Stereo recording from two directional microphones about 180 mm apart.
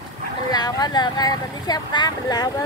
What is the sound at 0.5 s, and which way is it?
Speech, 20° left (ahead or behind).